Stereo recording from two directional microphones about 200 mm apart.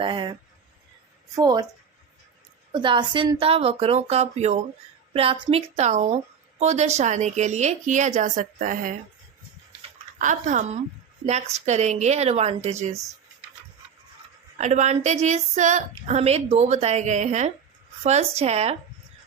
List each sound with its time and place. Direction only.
0.0 s speech: 25° right (ahead or behind)
1.4 s speech: 20° right (ahead or behind)
2.7 s a woman's voice: 25° right (ahead or behind); by 9.0 s 40° right (ahead or behind)
10.2 s a woman's voice: 40° right (ahead or behind)
14.6 s a woman's voice: 35° right (ahead or behind)